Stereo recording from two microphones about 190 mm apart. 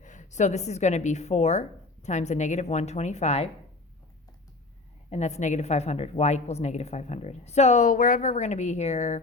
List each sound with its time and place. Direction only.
0.0 s a woman's voice: 40° left (ahead or behind)
5.1 s a woman's voice: 35° left (ahead or behind)